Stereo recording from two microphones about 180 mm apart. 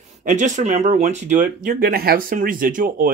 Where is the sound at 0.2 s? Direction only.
45° right (ahead or behind).